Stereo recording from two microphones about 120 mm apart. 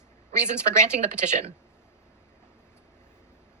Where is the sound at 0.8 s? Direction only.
90° right.